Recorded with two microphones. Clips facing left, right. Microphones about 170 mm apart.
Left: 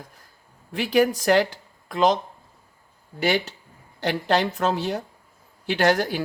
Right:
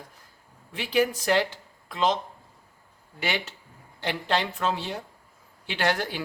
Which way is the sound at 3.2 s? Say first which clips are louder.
Left 7 dB; 40° left (ahead or behind).